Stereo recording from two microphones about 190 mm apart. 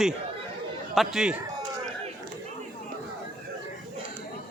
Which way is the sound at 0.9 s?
5° right (ahead or behind).